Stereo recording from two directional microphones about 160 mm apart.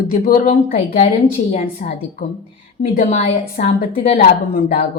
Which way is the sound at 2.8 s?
90° left.